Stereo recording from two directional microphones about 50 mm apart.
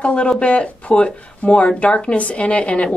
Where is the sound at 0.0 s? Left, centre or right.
Left.